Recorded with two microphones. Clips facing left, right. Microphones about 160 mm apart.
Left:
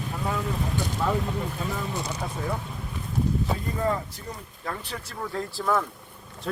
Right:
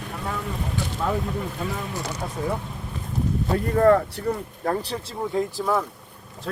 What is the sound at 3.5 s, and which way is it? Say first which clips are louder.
Speech: right 9 dB; 65° right (ahead or behind).